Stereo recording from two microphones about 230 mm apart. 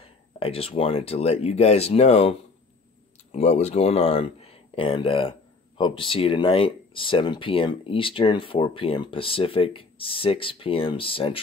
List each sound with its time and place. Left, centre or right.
0.0 s speech: left